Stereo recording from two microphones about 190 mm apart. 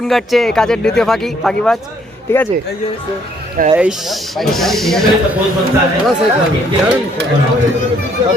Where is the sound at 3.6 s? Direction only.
50° right (ahead or behind).